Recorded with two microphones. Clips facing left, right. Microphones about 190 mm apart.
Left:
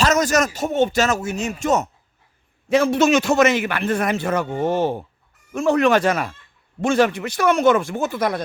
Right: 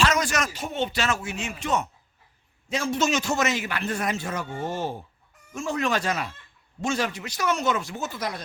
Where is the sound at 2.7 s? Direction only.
65° left (ahead or behind).